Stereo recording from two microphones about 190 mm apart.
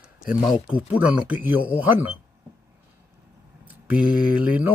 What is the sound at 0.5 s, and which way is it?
Mantra, 5° right (ahead or behind).